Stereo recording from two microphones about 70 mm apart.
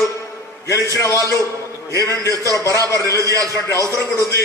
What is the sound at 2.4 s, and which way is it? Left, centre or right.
Speech, left.